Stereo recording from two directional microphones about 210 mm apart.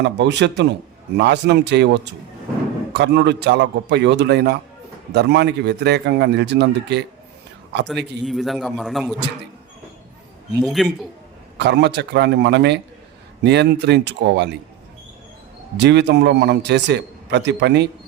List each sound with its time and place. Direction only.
0.0 s a man's voice: 55° right (ahead or behind)
2.9 s a man's voice: 55° right (ahead or behind)
8.2 s a man's voice: centre (ahead or behind)
10.6 s a man's voice: centre (ahead or behind)
11.5 s a man's voice: 55° right (ahead or behind)
15.8 s a man's voice: 55° right (ahead or behind)